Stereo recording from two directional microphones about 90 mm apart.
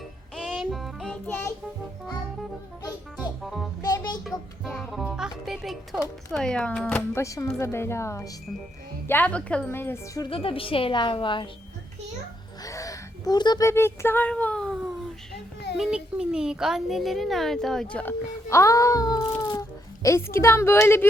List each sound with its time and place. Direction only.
0.4 s music: 10° right (ahead or behind)
3.4 s speech: centre (ahead or behind)
3.8 s music: 40° left (ahead or behind)
4.8 s speech: centre (ahead or behind)
6.3 s speech: 10° left (ahead or behind)
7.1 s a woman's voice: 35° left (ahead or behind)
9.0 s speech: 20° left (ahead or behind)
9.6 s a sound: 25° left (ahead or behind)
10.2 s a woman's voice: 90° left; by 11.4 s 65° left (ahead or behind)
12.6 s gasp: 40° left (ahead or behind)
13.6 s a sound: 30° left (ahead or behind)
14.3 s speech: 15° left (ahead or behind)
15.8 s speech: 10° right (ahead or behind); by 18.1 s 15° left (ahead or behind)
18.5 s a woman's voice: 35° left (ahead or behind)